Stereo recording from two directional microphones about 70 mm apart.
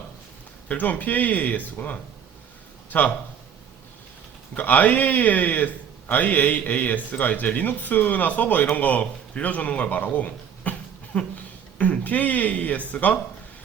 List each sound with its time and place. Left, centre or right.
0.7 s speech: left
4.5 s a man's voice: left